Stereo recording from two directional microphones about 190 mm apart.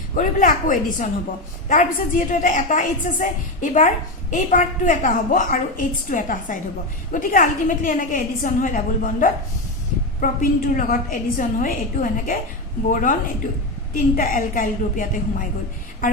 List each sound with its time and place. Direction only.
0.1 s a woman's voice: 45° left (ahead or behind)